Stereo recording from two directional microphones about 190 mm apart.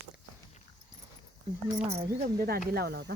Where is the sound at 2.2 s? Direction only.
55° right (ahead or behind).